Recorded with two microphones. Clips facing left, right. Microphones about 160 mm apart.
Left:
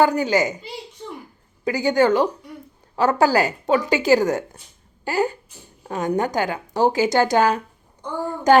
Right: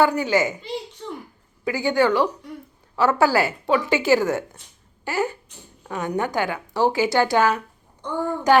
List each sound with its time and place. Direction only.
0.0 s a woman's voice: 40° left (ahead or behind)
0.4 s a child's voice: 20° left (ahead or behind)
1.6 s a woman's voice: 40° left (ahead or behind)